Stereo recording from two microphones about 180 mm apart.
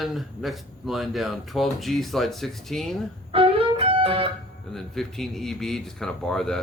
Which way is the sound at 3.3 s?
30° right (ahead or behind).